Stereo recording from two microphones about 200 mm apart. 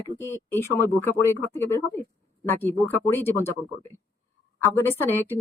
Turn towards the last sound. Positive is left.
turn(degrees=10)  # may be behind; listen again after turning